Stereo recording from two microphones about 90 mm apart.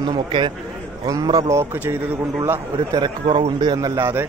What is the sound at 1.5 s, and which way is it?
Speech, 30° right (ahead or behind).